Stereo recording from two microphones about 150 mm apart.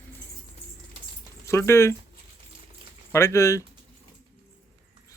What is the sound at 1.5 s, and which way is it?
Speech, 15° left (ahead or behind).